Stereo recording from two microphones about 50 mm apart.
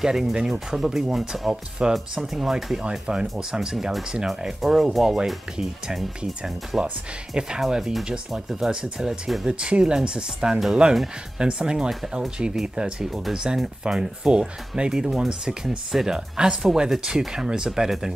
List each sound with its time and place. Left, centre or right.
0.0 s speech: centre
7.3 s speech: centre
13.1 s speech: centre